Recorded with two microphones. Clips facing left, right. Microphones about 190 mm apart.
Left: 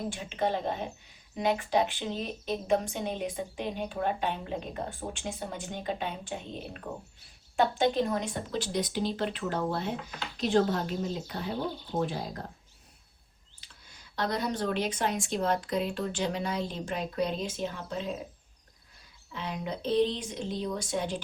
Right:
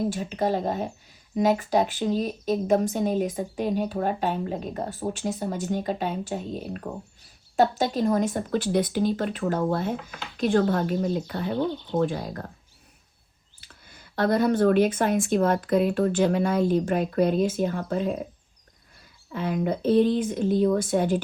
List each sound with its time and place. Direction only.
0.1 s speech: 40° right (ahead or behind)
13.6 s speech: 55° right (ahead or behind)
19.3 s speech: 50° right (ahead or behind)